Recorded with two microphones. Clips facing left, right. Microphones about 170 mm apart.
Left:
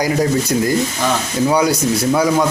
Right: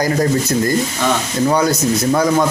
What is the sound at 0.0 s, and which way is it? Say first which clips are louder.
Speech: even; 10° left (ahead or behind).